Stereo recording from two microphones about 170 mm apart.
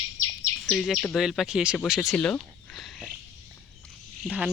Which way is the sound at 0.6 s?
5° left (ahead or behind).